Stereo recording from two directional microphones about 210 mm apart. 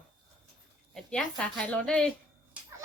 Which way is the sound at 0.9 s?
5° left (ahead or behind).